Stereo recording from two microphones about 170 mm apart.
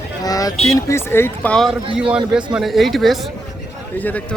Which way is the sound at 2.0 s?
5° right (ahead or behind).